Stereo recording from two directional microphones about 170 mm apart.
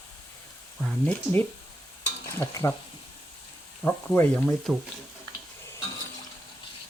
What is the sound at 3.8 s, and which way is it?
Speech, 10° left (ahead or behind).